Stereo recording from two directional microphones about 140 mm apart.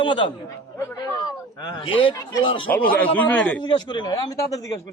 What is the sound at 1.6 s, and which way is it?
A man's voice, 35° left (ahead or behind).